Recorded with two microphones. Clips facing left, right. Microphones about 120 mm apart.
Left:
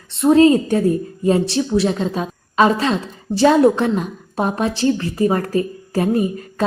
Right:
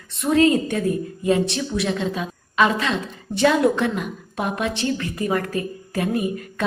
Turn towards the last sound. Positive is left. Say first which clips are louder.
# left 5 dB
turn(degrees=30)  # may be behind; listen again after turning